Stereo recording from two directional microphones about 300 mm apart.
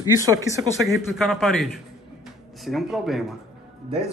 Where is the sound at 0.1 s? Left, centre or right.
Centre.